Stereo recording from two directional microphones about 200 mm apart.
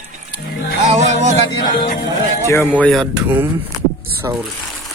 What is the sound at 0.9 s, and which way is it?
Music, 35° right (ahead or behind).